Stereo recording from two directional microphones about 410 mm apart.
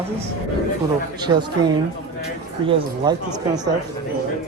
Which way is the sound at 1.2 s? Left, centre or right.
Centre.